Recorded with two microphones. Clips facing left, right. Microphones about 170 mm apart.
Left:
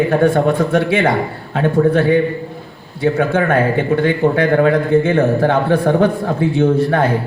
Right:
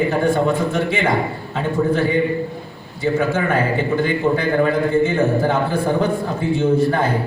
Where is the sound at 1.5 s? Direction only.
55° left (ahead or behind).